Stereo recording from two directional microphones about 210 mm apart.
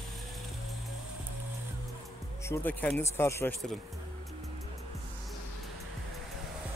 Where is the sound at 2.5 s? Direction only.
10° left (ahead or behind).